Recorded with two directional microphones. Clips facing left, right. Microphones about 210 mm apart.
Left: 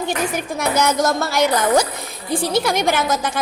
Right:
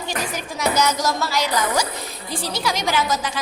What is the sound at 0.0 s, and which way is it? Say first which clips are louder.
A woman's voice: left 5 dB; 55° left (ahead or behind).